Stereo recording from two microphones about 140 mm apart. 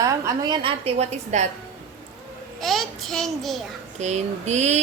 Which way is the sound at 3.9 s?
55° right (ahead or behind).